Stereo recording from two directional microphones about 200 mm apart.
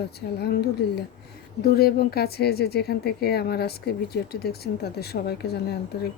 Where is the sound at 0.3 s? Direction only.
55° left (ahead or behind).